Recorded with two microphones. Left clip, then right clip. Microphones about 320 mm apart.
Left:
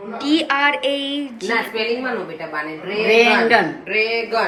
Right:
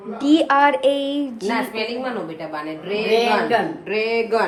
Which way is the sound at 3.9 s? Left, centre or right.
Right.